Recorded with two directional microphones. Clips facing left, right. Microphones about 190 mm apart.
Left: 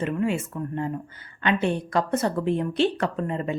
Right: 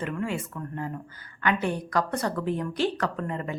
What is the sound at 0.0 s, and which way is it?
Speech, 20° left (ahead or behind).